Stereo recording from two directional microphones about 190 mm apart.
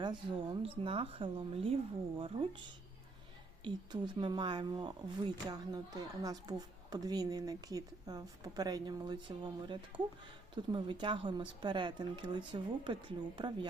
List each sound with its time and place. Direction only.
0.6 s speech: 30° right (ahead or behind)